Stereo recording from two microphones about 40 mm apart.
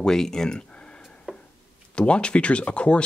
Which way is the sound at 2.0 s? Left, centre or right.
Left.